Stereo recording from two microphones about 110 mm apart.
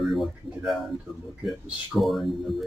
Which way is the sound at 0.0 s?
Centre (ahead or behind).